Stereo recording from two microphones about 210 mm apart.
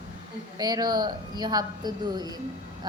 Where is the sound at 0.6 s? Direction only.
20° right (ahead or behind).